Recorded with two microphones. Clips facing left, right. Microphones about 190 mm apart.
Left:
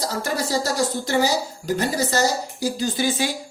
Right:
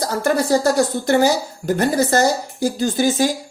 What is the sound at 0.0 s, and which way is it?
A woman's voice, 55° right (ahead or behind).